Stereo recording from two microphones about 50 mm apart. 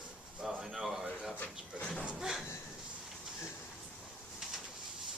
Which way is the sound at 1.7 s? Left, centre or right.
Centre.